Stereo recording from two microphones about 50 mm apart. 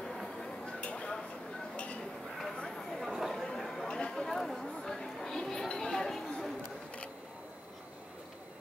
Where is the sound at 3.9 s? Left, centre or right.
Centre.